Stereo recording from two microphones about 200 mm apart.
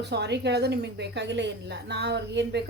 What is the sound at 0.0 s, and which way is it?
A woman's voice, 55° right (ahead or behind).